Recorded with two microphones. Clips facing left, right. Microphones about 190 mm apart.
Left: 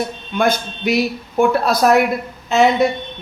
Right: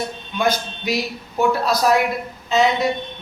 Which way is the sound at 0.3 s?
55° left (ahead or behind).